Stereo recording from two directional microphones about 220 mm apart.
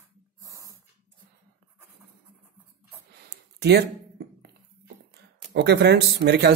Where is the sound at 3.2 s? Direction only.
50° right (ahead or behind).